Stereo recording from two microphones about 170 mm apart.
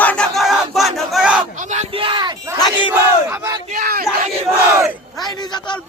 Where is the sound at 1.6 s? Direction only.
45° right (ahead or behind); by 2.5 s 25° right (ahead or behind).